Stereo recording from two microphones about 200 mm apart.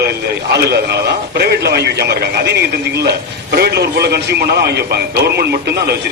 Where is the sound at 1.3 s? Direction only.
55° right (ahead or behind).